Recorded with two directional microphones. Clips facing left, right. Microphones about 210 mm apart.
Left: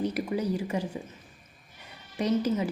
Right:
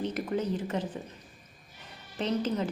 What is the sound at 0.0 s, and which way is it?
Speech, 10° left (ahead or behind).